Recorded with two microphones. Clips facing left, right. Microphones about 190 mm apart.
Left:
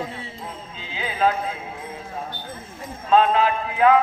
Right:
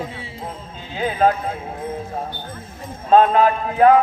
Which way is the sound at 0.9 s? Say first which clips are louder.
Right 4 dB; 50° right (ahead or behind).